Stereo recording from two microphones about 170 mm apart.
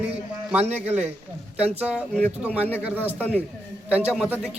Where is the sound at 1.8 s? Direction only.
5° right (ahead or behind).